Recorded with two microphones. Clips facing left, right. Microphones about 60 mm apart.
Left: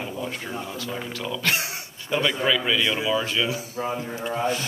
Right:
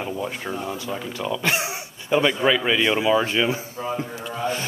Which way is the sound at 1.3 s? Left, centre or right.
Centre.